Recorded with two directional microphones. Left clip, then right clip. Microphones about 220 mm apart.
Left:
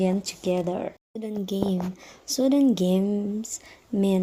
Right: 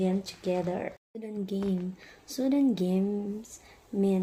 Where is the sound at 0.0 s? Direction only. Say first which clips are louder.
Left 5 dB; 30° left (ahead or behind).